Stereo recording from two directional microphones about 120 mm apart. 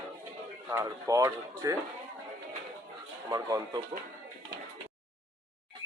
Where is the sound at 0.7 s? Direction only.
25° right (ahead or behind).